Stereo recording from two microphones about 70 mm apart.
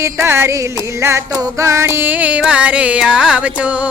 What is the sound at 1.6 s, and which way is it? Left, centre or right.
Music, right.